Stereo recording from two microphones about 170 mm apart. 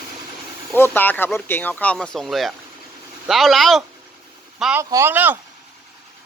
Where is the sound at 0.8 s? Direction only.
10° left (ahead or behind).